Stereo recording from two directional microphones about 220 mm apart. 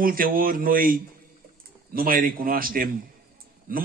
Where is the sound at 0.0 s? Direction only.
40° right (ahead or behind).